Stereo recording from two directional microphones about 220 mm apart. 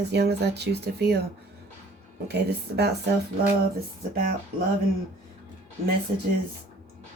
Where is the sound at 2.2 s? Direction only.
50° right (ahead or behind).